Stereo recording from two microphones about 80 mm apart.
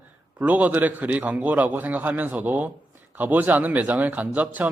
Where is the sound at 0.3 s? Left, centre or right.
Right.